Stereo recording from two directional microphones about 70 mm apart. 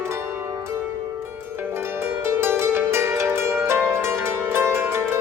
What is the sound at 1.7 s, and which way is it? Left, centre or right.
Pizzicato, right.